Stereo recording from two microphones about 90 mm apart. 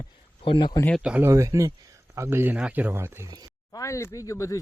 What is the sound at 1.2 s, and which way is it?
Speech, 35° right (ahead or behind).